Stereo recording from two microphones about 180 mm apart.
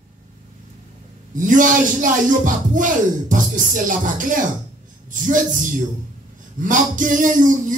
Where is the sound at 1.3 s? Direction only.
45° right (ahead or behind).